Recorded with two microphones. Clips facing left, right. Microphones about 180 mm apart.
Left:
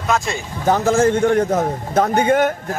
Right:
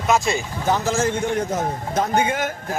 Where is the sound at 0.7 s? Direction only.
55° left (ahead or behind).